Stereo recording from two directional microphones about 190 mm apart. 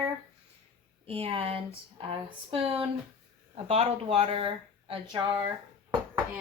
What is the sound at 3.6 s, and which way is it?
Speech, 30° right (ahead or behind).